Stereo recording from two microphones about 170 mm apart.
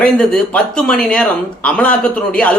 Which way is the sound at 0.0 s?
5° left (ahead or behind).